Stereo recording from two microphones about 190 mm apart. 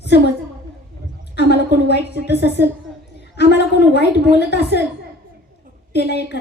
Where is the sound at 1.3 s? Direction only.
60° left (ahead or behind).